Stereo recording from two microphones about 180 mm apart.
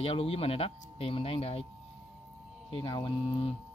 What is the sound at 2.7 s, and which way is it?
Speech, 25° left (ahead or behind).